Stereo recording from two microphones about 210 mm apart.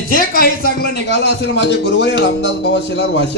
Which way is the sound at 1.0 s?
55° left (ahead or behind).